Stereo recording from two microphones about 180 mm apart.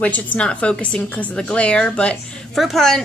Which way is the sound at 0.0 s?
10° left (ahead or behind).